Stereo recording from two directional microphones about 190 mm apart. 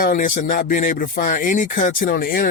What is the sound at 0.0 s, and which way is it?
Speech, 45° left (ahead or behind).